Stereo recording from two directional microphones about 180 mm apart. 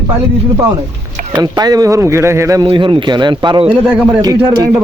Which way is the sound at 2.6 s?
30° right (ahead or behind).